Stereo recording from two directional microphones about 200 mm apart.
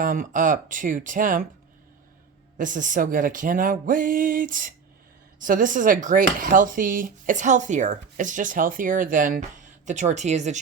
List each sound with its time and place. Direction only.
0.0 s speech: 40° right (ahead or behind)
2.6 s speech: 40° right (ahead or behind)